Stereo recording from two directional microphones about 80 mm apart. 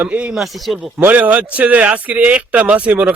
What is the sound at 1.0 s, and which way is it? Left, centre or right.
Speech, centre.